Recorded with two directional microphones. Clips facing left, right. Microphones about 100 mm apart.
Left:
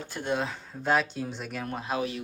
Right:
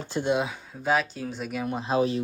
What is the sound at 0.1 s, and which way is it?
Speech, 20° right (ahead or behind).